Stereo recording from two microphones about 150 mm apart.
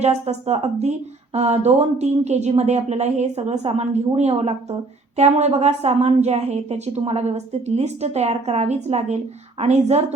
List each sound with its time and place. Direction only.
0.0 s a woman's voice: 45° right (ahead or behind)